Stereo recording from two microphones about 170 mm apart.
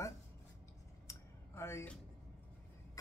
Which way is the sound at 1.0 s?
15° left (ahead or behind).